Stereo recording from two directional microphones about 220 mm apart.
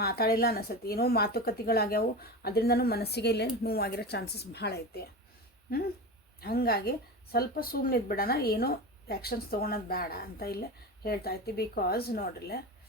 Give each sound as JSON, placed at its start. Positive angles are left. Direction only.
{"t": 0.0, "sound": "a woman's voice", "side_deg": 45}
{"t": 6.4, "sound": "a woman's voice", "side_deg": 45}